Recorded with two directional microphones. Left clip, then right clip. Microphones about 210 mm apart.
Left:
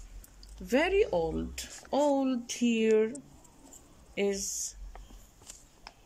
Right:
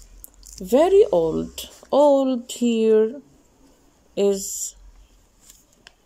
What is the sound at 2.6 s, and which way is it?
Speech, centre (ahead or behind).